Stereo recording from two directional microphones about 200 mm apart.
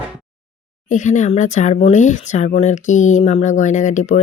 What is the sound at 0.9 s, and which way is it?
Speech, 40° left (ahead or behind).